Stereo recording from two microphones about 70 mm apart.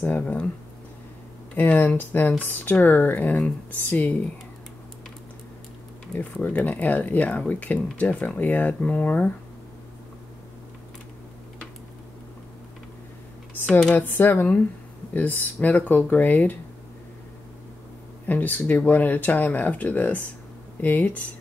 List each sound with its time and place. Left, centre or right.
0.0 s speech: left
1.5 s speech: left
6.1 s speech: left
14.0 s speech: left
18.2 s speech: left